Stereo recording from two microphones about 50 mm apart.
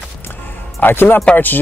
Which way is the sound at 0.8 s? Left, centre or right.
Left.